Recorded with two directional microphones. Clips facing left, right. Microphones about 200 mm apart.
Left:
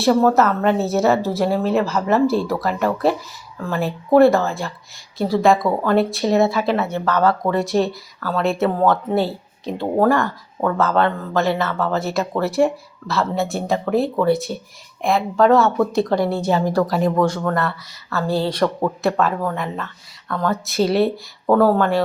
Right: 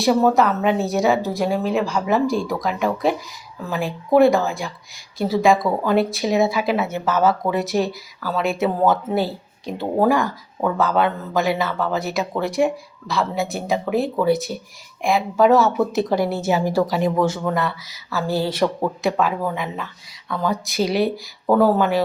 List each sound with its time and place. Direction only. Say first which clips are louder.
0.0 s speech: left 1 dB; 5° right (ahead or behind)